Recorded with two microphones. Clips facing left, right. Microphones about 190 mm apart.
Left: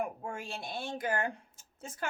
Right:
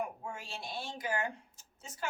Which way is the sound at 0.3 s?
55° left (ahead or behind).